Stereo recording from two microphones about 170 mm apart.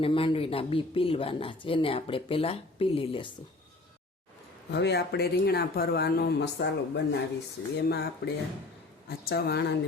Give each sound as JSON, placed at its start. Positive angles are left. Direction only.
{"t": 0.0, "sound": "speech", "side_deg": 30}
{"t": 4.7, "sound": "speech", "side_deg": 80}
{"t": 7.8, "sound": "speech", "side_deg": 75}